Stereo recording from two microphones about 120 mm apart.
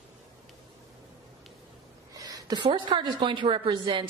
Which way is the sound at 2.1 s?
30° right (ahead or behind).